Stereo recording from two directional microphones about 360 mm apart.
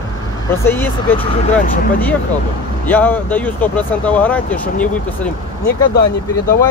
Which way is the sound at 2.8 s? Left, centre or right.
Centre.